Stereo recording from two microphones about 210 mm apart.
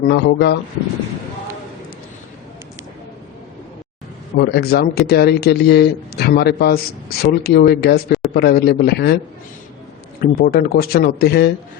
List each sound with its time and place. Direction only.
0.0 s a man's voice: 50° left (ahead or behind)
4.4 s a man's voice: 50° left (ahead or behind)
10.2 s a man's voice: 45° left (ahead or behind)